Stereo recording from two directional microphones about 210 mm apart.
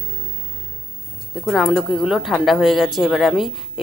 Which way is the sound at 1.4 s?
Centre (ahead or behind).